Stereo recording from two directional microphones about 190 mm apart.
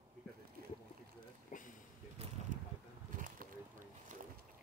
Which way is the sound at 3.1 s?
45° right (ahead or behind).